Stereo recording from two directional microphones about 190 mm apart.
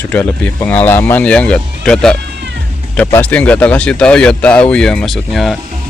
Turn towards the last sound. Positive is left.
turn(degrees=0)  # may be behind; listen again after turning